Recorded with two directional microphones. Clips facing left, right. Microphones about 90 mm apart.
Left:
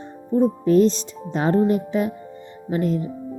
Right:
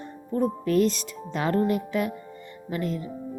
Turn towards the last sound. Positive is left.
turn(degrees=35)  # may be behind; listen again after turning